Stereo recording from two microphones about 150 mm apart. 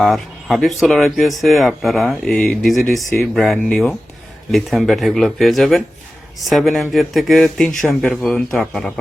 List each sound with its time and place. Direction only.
0.0 s speech: centre (ahead or behind)